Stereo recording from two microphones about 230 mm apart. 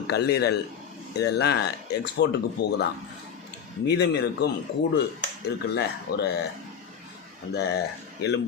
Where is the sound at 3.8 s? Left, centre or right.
Left.